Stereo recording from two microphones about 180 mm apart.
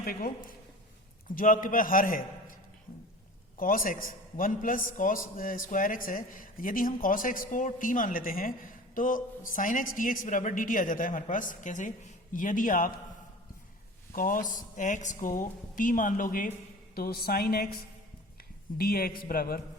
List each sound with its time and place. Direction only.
0.0 s a woman's voice: 55° left (ahead or behind)
3.6 s a man's voice: 50° left (ahead or behind)
14.1 s a man's voice: 50° left (ahead or behind)
18.8 s a woman's voice: 55° left (ahead or behind)